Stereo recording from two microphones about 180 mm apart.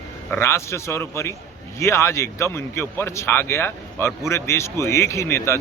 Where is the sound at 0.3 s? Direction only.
15° left (ahead or behind).